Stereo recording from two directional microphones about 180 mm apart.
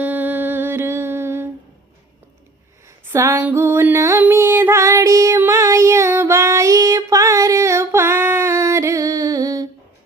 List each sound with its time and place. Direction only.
0.0 s humming: 10° right (ahead or behind)
3.1 s music: 15° right (ahead or behind)